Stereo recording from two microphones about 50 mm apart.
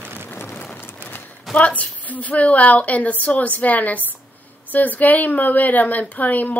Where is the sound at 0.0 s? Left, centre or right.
Right.